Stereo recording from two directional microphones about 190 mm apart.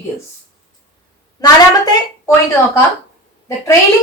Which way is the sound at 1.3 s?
20° left (ahead or behind).